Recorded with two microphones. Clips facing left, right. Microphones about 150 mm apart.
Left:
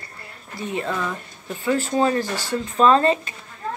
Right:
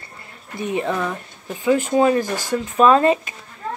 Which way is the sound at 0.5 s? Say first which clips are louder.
Right 4 dB; 20° right (ahead or behind).